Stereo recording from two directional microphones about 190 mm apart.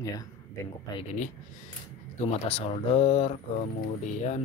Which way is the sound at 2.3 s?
30° left (ahead or behind).